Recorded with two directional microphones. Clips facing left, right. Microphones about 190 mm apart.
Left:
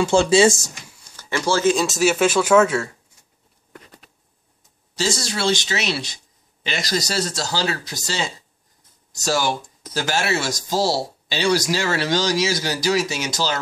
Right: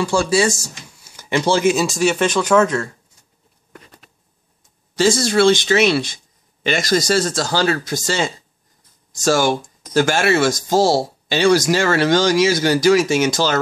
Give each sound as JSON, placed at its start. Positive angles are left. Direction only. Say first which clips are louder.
{"t": 0.0, "sound": "speech", "louder": "left 2 dB", "side_deg": 25}
{"t": 1.1, "sound": "speech", "louder": "right 4 dB", "side_deg": -20}
{"t": 1.9, "sound": "speech", "louder": "right 1 dB", "side_deg": 5}
{"t": 4.9, "sound": "speech", "louder": "right 9 dB", "side_deg": -55}